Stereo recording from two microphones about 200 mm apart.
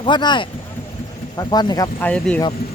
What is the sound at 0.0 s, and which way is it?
Speech, 20° left (ahead or behind).